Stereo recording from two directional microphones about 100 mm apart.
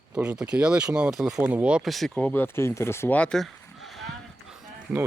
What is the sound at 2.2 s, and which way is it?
Speech, 20° left (ahead or behind).